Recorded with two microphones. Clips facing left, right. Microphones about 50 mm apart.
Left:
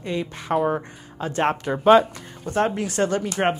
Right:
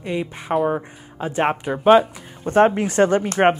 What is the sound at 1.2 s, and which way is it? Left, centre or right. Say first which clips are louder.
Speech: right 2 dB; centre.